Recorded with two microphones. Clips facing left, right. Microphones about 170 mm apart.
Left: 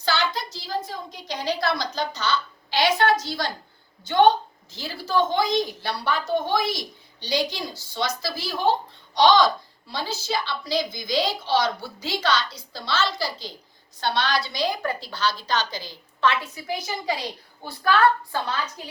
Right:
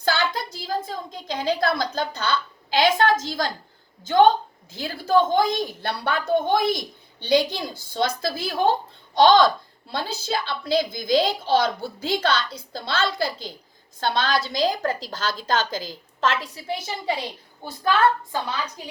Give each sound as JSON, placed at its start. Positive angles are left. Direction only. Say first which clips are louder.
{"t": 0.0, "sound": "a woman's voice", "louder": "right 2 dB", "side_deg": -55}
{"t": 4.7, "sound": "a woman's voice", "louder": "right 5 dB", "side_deg": -55}
{"t": 16.4, "sound": "a woman's voice", "louder": "even", "side_deg": -30}